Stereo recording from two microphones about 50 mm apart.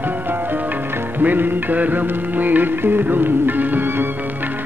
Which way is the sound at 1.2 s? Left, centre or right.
Right.